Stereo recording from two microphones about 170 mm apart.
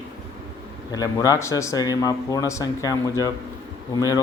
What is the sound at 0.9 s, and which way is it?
Speech, 20° left (ahead or behind).